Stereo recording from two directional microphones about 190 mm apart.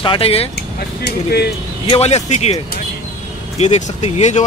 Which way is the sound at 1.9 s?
35° left (ahead or behind).